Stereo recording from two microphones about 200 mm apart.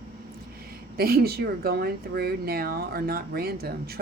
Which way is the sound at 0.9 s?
50° right (ahead or behind).